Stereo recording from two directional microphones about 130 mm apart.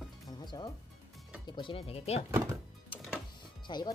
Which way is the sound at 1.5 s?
40° left (ahead or behind).